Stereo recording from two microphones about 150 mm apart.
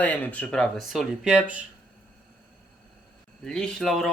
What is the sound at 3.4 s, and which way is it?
Speech, 5° left (ahead or behind).